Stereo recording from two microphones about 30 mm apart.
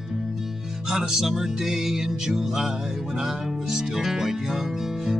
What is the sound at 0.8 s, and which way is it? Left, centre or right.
Speech, centre.